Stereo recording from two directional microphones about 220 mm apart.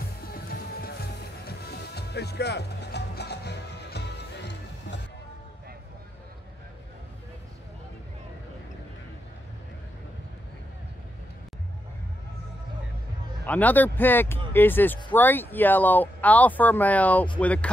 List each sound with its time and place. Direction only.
0.3 s music: 45° left (ahead or behind)
13.5 s speech: 5° left (ahead or behind)